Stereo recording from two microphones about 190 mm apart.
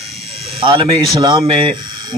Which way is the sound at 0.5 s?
25° right (ahead or behind).